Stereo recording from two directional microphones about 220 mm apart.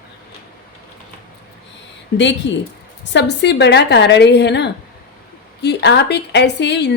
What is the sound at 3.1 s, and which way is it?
A woman's voice, 50° left (ahead or behind).